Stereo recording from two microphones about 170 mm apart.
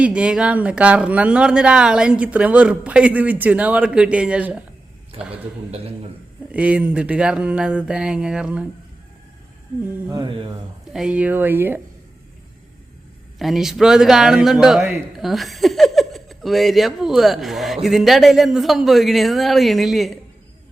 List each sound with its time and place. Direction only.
0.0 s speech: 5° right (ahead or behind)
5.2 s a man's voice: 35° right (ahead or behind)
6.5 s a man's voice: 5° right (ahead or behind)
10.1 s speech: 25° right (ahead or behind)
10.9 s speech: 5° right (ahead or behind)
13.4 s a man's voice: centre (ahead or behind)